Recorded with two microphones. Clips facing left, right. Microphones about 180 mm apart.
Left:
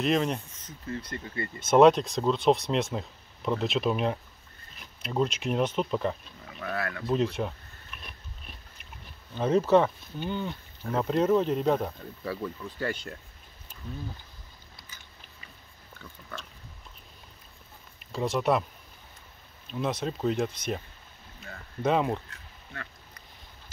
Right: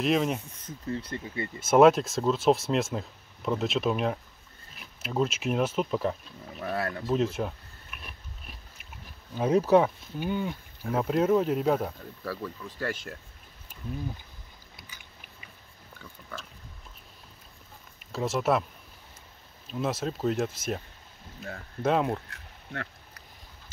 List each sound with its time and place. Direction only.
0.0 s speech: 5° right (ahead or behind)
1.2 s speech: 20° right (ahead or behind)
1.7 s speech: 5° right (ahead or behind)
6.6 s speech: 35° right (ahead or behind)
7.1 s biting: 5° right (ahead or behind)
9.3 s speech: 10° right (ahead or behind)
14.8 s biting: 15° right (ahead or behind)
16.0 s pig: centre (ahead or behind)
18.1 s speech: 5° right (ahead or behind)
19.7 s speech: 5° right (ahead or behind)
21.8 s speech: centre (ahead or behind)
22.3 s duck: 65° right (ahead or behind)